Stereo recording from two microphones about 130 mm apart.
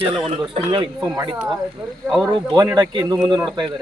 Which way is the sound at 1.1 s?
25° right (ahead or behind).